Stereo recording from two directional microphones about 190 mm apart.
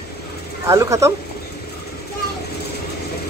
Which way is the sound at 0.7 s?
15° right (ahead or behind).